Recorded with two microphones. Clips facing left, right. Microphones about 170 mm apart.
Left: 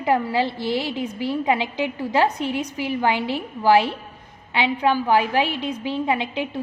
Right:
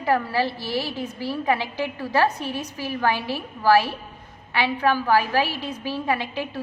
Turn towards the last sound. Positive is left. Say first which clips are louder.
# left 2 dB
turn(degrees=20)  # may be behind; listen again after turning